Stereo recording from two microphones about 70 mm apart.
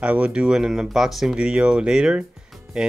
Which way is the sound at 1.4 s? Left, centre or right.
Centre.